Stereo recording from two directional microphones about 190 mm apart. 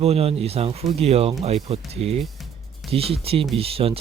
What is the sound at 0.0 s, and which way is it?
Speech, 30° right (ahead or behind).